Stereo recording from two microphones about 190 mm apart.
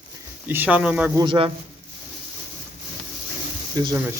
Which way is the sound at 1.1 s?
25° right (ahead or behind).